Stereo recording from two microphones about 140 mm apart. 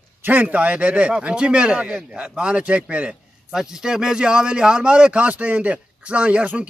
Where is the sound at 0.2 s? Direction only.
10° right (ahead or behind).